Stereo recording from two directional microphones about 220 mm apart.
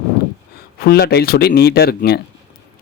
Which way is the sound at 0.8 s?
45° left (ahead or behind).